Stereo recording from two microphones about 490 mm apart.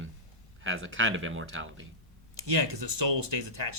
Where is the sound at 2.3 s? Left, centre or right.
Right.